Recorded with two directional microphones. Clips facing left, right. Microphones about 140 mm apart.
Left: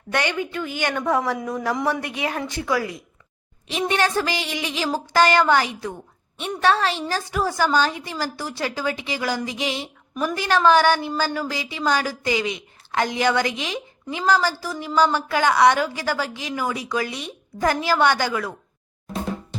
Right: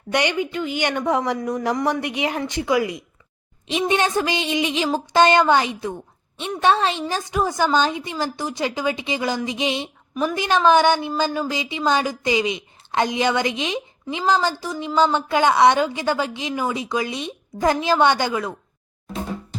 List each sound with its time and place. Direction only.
0.1 s a woman's voice: 15° right (ahead or behind)
1.4 s a man's voice: 5° left (ahead or behind)
2.0 s a woman's voice: 20° right (ahead or behind)